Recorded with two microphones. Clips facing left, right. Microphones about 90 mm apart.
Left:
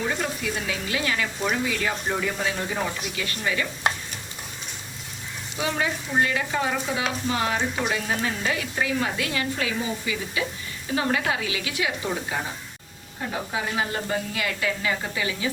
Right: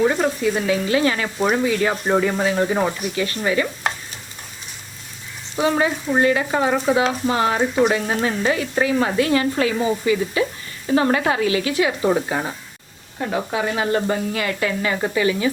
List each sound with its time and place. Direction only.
0.2 s speech: 40° right (ahead or behind)
5.5 s speech: 35° right (ahead or behind)
13.1 s speech: 65° right (ahead or behind); by 15.4 s 50° right (ahead or behind)